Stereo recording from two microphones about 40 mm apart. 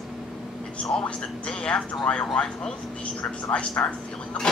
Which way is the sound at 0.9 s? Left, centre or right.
Left.